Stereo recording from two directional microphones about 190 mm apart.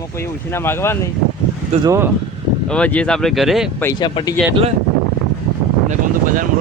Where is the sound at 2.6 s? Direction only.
5° left (ahead or behind).